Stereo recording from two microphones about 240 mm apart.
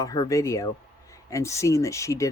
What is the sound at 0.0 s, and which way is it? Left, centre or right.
Speech, centre.